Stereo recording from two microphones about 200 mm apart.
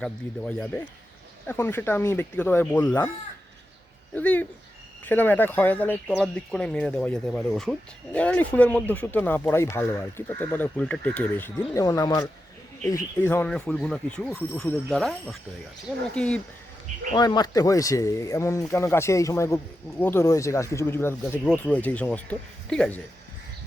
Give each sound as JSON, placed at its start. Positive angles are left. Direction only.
{"t": 0.0, "sound": "speech", "side_deg": 5}
{"t": 4.1, "sound": "speech", "side_deg": 10}
{"t": 17.2, "sound": "speech", "side_deg": 20}